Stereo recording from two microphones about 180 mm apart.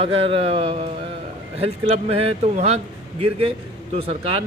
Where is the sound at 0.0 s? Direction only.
30° right (ahead or behind).